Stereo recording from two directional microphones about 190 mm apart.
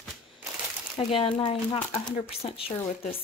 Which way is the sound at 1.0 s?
25° left (ahead or behind).